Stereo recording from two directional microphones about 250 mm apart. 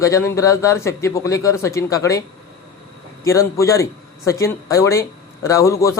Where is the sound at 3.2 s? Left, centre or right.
Centre.